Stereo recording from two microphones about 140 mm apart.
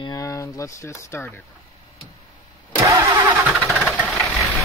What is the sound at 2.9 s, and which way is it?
Vehicle, 20° right (ahead or behind).